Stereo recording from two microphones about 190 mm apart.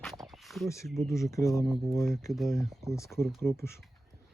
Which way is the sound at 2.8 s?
15° left (ahead or behind).